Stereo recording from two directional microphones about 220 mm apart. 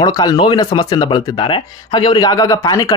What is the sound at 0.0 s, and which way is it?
Speech, 15° left (ahead or behind).